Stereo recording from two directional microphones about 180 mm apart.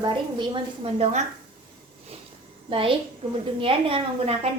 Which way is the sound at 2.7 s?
30° right (ahead or behind).